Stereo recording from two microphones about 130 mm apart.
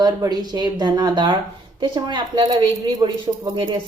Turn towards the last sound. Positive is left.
turn(degrees=-35)  # may be behind; listen again after turning